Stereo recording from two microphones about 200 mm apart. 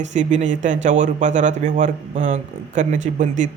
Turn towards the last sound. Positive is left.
turn(degrees=-40)  # may be behind; listen again after turning